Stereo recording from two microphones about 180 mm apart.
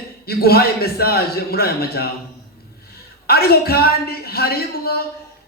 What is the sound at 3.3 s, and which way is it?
A man's voice, 60° left (ahead or behind).